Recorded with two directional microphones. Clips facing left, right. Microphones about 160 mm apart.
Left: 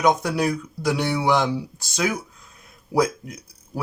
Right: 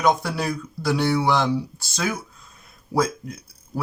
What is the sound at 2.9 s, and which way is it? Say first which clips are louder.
Speech: left 2 dB; 15° left (ahead or behind).